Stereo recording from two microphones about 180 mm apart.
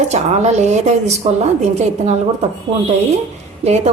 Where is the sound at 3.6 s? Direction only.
35° right (ahead or behind).